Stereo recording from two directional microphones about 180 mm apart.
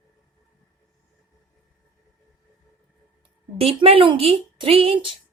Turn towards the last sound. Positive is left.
turn(degrees=-30)  # may be behind; listen again after turning